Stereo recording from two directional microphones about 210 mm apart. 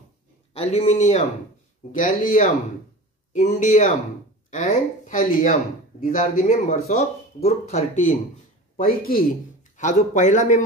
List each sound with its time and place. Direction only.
0.5 s a man's voice: 30° left (ahead or behind)